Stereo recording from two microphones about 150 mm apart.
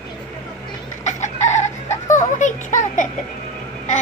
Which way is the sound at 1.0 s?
50° left (ahead or behind).